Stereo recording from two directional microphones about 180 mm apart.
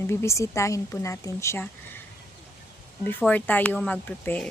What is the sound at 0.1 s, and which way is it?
A woman's voice, 15° left (ahead or behind).